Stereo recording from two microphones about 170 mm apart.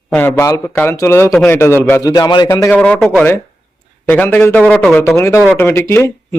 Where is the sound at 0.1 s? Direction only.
10° left (ahead or behind).